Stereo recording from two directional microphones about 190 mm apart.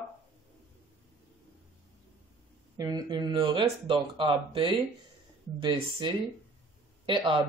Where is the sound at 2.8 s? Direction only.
20° right (ahead or behind).